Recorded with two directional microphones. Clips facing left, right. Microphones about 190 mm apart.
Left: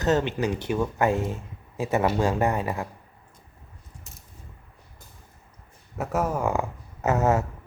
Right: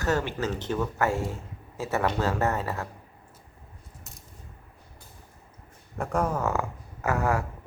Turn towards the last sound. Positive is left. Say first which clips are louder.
# left 4 dB
turn(degrees=20)  # may be behind; listen again after turning